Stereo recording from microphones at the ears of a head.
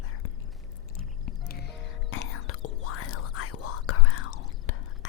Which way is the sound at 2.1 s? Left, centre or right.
Left.